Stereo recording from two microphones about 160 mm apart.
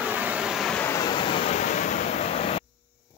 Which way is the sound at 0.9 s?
25° left (ahead or behind).